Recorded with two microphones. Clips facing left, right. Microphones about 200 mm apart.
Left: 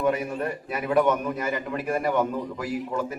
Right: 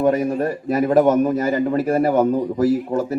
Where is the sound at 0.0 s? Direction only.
40° right (ahead or behind).